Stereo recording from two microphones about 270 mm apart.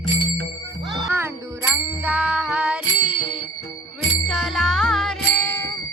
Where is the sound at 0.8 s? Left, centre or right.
Centre.